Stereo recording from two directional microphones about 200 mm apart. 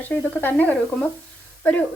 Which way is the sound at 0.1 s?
5° left (ahead or behind).